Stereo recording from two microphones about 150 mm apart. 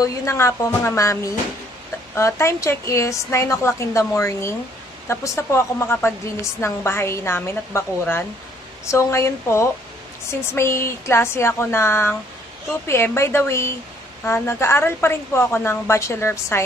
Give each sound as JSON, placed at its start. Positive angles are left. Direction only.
{"t": 0.0, "sound": "a woman's voice", "side_deg": 20}
{"t": 2.1, "sound": "a woman's voice", "side_deg": 20}